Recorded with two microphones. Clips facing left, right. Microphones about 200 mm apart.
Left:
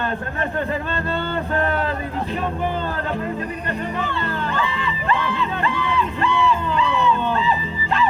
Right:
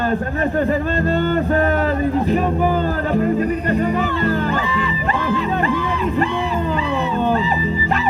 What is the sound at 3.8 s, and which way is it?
Music, 40° right (ahead or behind).